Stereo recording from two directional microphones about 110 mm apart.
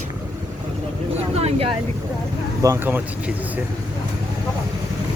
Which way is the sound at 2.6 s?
30° right (ahead or behind).